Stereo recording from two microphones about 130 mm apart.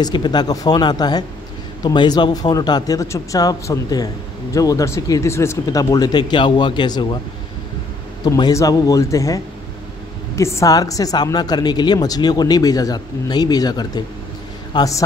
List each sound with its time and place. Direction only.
0.0 s speech: 35° left (ahead or behind)
8.2 s a man's voice: 30° left (ahead or behind)